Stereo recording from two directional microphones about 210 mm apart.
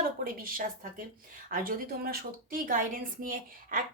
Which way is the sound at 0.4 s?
40° right (ahead or behind).